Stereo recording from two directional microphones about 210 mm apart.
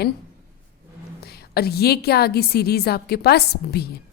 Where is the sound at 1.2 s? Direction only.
50° left (ahead or behind).